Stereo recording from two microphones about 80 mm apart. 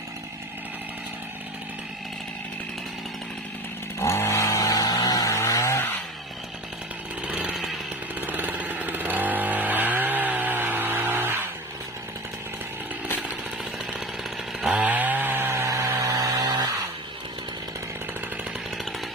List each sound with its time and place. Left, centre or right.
4.0 s chainsaw: left
7.2 s chainsaw: centre
8.2 s chainsaw: right
14.6 s chainsaw: centre; by 15.9 s right
16.0 s vehicle: right